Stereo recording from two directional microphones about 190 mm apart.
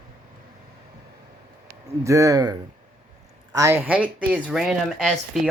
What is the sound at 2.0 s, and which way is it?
Speech, 15° right (ahead or behind).